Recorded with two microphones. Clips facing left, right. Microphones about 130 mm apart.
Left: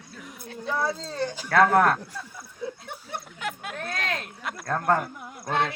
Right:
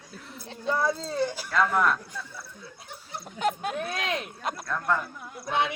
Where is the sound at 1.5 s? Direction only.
65° left (ahead or behind).